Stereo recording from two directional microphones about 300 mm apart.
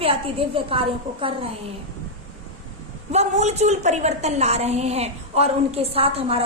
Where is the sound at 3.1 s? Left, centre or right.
Right.